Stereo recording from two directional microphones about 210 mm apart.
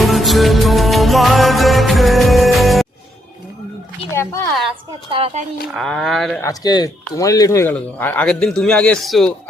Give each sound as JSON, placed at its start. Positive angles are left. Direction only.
{"t": 0.0, "sound": "music", "side_deg": 0}
{"t": 4.1, "sound": "a woman's voice", "side_deg": 10}
{"t": 5.1, "sound": "speech", "side_deg": -30}
{"t": 5.7, "sound": "speech", "side_deg": 0}
{"t": 6.4, "sound": "speech", "side_deg": 20}